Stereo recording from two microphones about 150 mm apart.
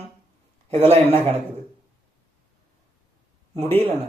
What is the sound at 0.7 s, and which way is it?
Speech, 40° right (ahead or behind).